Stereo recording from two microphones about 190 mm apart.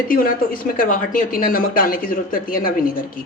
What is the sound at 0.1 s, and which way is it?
Speech, 50° left (ahead or behind).